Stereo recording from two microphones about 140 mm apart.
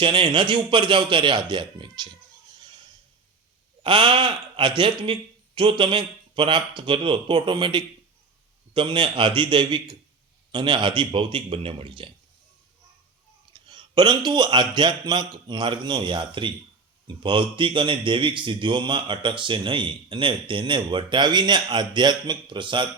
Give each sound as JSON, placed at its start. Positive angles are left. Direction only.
{"t": 0.0, "sound": "a man's voice", "side_deg": -35}
{"t": 3.8, "sound": "a man's voice", "side_deg": -35}
{"t": 13.5, "sound": "a man's voice", "side_deg": -35}